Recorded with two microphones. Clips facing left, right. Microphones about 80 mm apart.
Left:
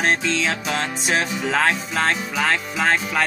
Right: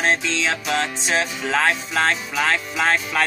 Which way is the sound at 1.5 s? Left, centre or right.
Left.